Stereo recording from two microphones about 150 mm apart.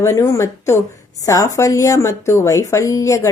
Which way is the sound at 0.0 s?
20° left (ahead or behind).